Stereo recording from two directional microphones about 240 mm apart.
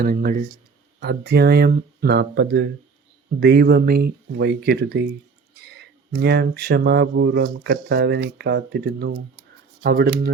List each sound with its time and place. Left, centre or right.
0.0 s speech: right
6.1 s speech: right